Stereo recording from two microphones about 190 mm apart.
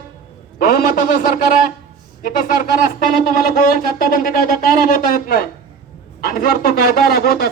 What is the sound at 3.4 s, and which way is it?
Speech, 50° left (ahead or behind).